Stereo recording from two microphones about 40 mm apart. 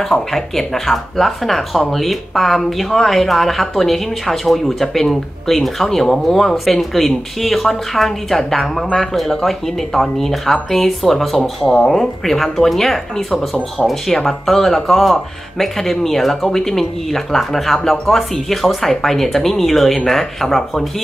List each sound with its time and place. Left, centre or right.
0.1 s speech: centre
13.3 s speech: centre
14.0 s speech: centre